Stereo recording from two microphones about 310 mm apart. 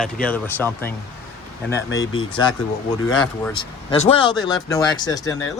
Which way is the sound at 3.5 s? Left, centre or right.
Centre.